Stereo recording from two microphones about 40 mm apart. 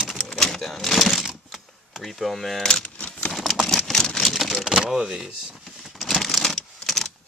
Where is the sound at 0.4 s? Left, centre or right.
Centre.